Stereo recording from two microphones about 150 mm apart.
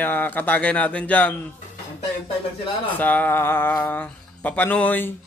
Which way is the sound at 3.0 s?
10° left (ahead or behind).